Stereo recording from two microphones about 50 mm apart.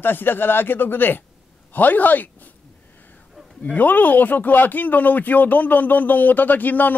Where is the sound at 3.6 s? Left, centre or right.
Left.